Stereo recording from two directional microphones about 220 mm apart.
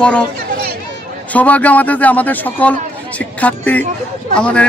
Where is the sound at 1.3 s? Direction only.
5° left (ahead or behind).